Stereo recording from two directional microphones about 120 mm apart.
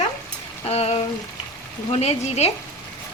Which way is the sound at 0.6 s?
55° left (ahead or behind).